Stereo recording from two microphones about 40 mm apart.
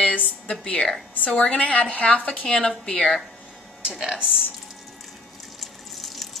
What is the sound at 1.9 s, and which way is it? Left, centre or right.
Speech, left.